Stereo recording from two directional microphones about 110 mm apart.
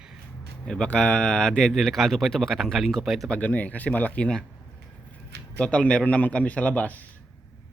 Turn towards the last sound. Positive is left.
turn(degrees=15)  # may be behind; listen again after turning